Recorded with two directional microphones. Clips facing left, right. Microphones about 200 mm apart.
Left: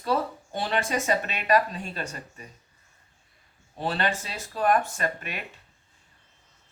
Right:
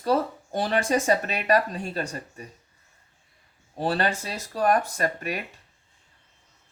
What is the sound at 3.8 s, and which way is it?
Speech, 40° right (ahead or behind).